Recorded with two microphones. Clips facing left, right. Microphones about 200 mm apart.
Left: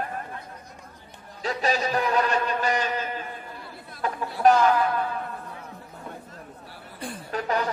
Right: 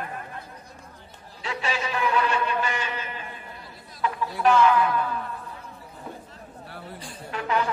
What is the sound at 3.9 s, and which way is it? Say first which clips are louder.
Chatter: right 1 dB; 50° left (ahead or behind).